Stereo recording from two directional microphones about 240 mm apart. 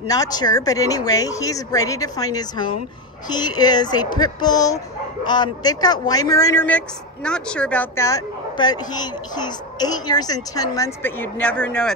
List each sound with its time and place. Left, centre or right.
0.1 s a woman's voice: centre